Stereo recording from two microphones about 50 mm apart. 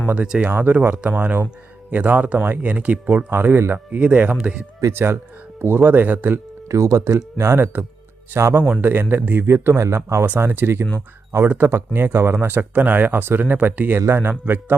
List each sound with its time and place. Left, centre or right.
0.4 s speech: right
3.2 s speech: right
3.7 s speech: right
4.9 s speech: right
5.8 s speech: right
6.7 s speech: right
8.6 s speech: right
9.5 s speech: right
10.2 s speech: right
11.4 s speech: right
11.9 s speech: right
12.5 s speech: right